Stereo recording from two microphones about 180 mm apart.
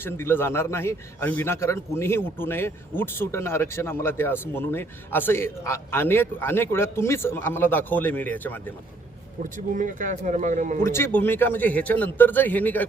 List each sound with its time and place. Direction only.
0.0 s a man's voice: 15° left (ahead or behind)
9.4 s speech: 45° right (ahead or behind)
10.8 s a man's voice: 15° left (ahead or behind)